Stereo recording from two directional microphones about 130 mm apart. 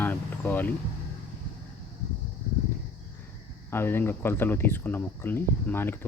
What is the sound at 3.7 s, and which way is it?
Speech, 15° left (ahead or behind).